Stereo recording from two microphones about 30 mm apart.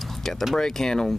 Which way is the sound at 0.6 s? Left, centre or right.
Centre.